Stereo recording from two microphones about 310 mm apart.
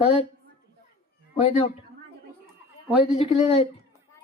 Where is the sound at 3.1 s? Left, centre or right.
Centre.